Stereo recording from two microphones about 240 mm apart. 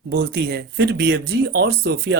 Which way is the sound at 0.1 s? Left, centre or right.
Right.